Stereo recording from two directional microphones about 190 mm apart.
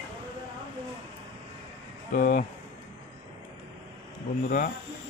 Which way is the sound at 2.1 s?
45° left (ahead or behind).